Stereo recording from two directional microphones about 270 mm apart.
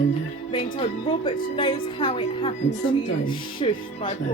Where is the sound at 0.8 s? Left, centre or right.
Centre.